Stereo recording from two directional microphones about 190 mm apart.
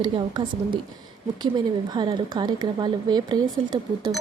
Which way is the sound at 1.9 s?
25° right (ahead or behind).